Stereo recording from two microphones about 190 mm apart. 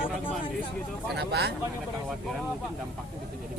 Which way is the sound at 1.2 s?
60° right (ahead or behind).